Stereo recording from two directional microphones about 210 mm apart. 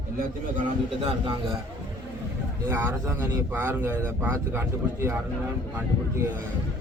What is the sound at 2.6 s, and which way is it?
Speech, 15° right (ahead or behind).